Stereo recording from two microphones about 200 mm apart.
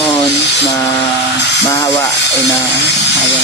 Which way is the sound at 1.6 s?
15° left (ahead or behind).